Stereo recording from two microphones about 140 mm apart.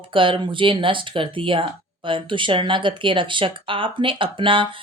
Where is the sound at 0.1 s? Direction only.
40° right (ahead or behind).